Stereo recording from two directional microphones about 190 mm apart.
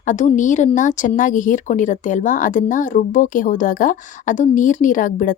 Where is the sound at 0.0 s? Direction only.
40° left (ahead or behind).